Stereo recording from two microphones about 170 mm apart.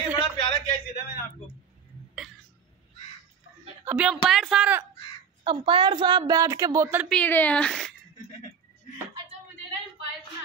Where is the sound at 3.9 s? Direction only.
5° right (ahead or behind).